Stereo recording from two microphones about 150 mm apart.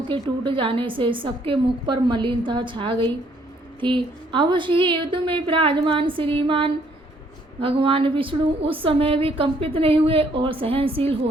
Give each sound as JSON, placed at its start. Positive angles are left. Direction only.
{"t": 0.1, "sound": "a woman's voice", "side_deg": -35}